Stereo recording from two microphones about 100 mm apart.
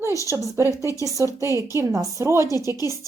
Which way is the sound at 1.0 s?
35° right (ahead or behind).